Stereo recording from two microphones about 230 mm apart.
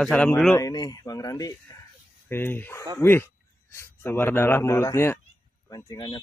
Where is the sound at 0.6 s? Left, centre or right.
Centre.